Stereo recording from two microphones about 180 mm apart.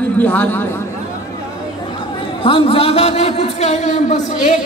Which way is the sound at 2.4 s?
30° left (ahead or behind).